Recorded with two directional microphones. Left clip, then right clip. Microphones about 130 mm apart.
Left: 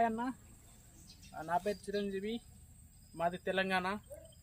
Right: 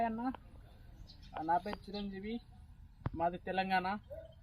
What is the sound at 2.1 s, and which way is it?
A man's voice, 25° left (ahead or behind).